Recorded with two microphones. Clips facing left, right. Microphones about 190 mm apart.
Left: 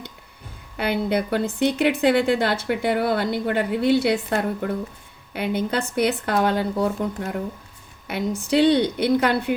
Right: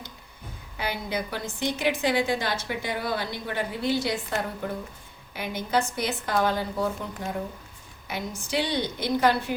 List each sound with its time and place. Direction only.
0.8 s a woman's voice: 60° left (ahead or behind)
8.4 s a woman's voice: 60° left (ahead or behind)